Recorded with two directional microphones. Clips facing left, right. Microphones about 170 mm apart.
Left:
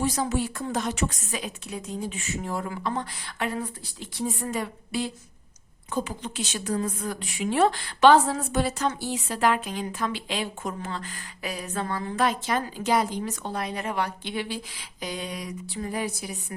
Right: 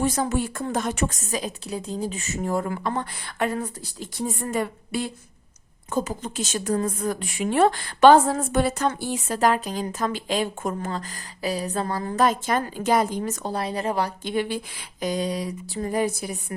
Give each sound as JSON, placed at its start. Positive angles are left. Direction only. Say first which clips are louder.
{"t": 0.0, "sound": "a woman's voice", "louder": "right 2 dB", "side_deg": -50}